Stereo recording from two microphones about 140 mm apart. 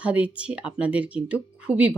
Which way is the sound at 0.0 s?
10° right (ahead or behind).